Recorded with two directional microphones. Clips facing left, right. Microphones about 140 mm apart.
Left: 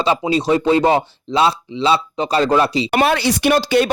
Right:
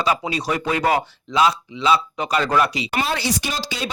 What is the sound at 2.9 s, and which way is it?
Speech, 65° left (ahead or behind).